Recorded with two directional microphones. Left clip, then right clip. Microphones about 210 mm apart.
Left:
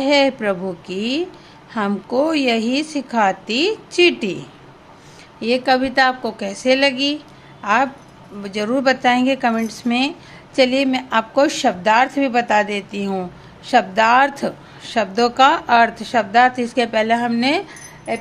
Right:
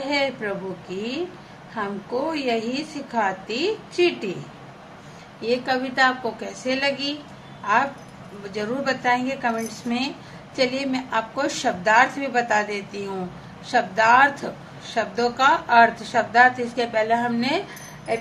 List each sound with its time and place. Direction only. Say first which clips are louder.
0.0 s a woman's voice: left 8 dB; 55° left (ahead or behind)
5.4 s a woman's voice: left 7 dB; 50° left (ahead or behind)